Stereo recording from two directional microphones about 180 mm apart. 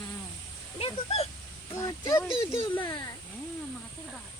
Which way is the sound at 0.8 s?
30° left (ahead or behind).